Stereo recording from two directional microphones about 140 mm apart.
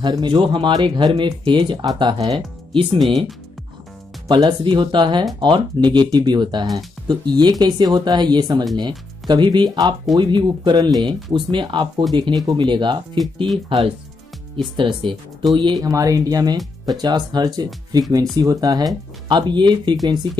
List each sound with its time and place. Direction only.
0.0 s speech: 35° right (ahead or behind)
4.3 s speech: 35° right (ahead or behind)